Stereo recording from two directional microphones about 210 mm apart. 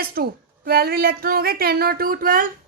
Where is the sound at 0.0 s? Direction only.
45° right (ahead or behind).